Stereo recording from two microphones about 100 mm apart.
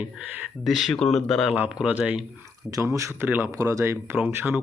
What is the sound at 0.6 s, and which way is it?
Speech, centre (ahead or behind).